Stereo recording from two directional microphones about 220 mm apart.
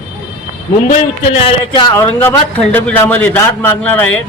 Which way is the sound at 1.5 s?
20° left (ahead or behind).